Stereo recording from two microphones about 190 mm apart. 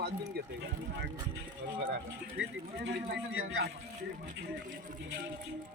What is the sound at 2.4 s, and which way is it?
Speech, 65° right (ahead or behind).